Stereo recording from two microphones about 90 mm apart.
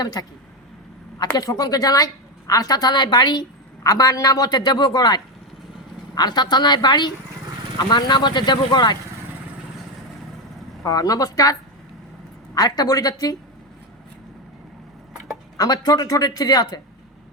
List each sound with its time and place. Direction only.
0.0 s a woman's voice: 50° left (ahead or behind)
3.8 s a woman's voice: 40° left (ahead or behind); by 9.0 s 55° left (ahead or behind)
10.8 s speech: 45° left (ahead or behind)
12.5 s a woman's voice: 45° left (ahead or behind)
15.5 s a woman's voice: 45° left (ahead or behind)